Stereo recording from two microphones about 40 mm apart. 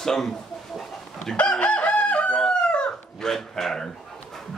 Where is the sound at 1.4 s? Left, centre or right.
Left.